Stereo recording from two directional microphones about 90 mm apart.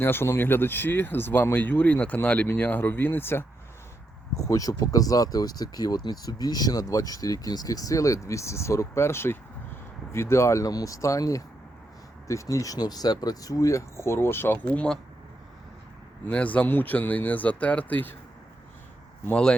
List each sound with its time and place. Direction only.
0.0 s speech: 25° left (ahead or behind)
4.4 s speech: 40° left (ahead or behind)
16.3 s speech: 15° left (ahead or behind)